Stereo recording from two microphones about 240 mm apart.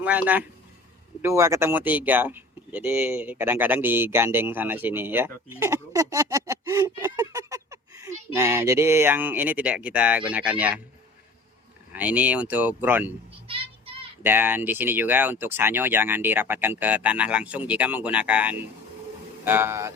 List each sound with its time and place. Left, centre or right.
0.0 s speech: centre
11.9 s speech: centre
13.5 s child singing: right
14.2 s speech: centre